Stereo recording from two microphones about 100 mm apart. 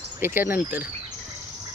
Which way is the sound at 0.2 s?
20° right (ahead or behind).